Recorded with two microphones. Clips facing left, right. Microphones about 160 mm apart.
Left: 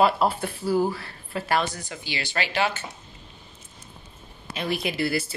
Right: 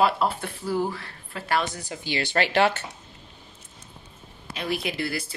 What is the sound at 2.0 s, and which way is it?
Speech, 55° right (ahead or behind).